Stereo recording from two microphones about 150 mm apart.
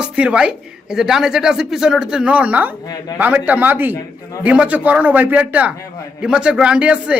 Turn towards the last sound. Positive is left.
turn(degrees=-10)  # may be behind; listen again after turning